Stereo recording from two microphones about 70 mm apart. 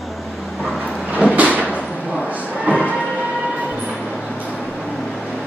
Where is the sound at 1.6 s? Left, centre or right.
Centre.